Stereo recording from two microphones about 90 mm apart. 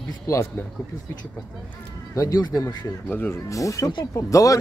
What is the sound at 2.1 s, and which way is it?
Speech, 40° left (ahead or behind).